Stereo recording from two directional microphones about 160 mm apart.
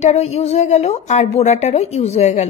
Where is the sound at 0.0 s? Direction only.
45° left (ahead or behind).